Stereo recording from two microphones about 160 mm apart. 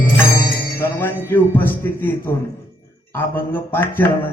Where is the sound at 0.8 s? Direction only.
15° left (ahead or behind).